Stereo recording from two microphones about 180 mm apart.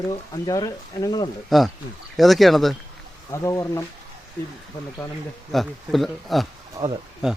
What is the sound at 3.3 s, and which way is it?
Speech, 20° left (ahead or behind).